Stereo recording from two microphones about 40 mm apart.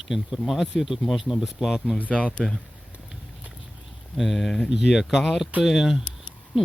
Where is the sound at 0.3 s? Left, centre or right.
Centre.